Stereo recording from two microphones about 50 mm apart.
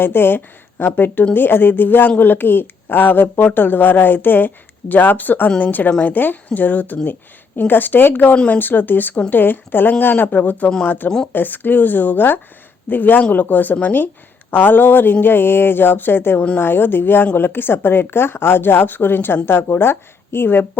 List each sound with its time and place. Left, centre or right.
0.0 s a woman's voice: left